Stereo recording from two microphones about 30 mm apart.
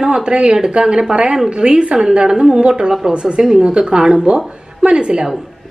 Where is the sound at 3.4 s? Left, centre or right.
Right.